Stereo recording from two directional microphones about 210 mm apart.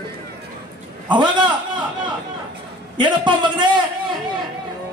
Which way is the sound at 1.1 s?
20° right (ahead or behind).